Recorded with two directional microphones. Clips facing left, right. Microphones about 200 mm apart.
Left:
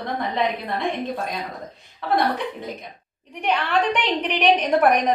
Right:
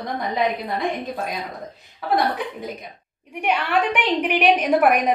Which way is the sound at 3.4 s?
10° right (ahead or behind).